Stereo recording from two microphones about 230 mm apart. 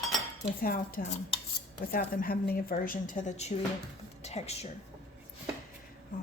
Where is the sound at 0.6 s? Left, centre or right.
Left.